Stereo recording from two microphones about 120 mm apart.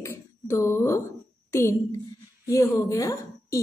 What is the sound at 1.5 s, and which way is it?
A woman's voice, 20° left (ahead or behind).